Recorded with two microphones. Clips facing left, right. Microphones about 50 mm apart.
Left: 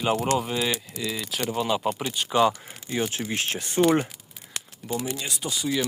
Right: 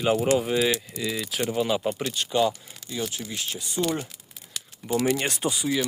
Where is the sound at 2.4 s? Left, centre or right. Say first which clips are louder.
Left 3 dB; left.